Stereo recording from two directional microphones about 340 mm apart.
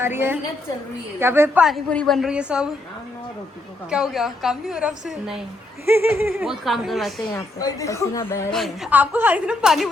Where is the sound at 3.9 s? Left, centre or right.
Centre.